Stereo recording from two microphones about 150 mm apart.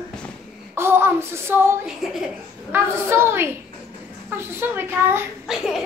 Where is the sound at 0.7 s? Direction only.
15° right (ahead or behind).